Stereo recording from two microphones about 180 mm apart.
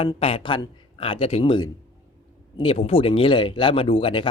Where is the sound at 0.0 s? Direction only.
30° left (ahead or behind).